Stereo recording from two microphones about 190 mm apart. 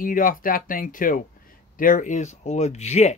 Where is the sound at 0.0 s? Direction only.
45° left (ahead or behind).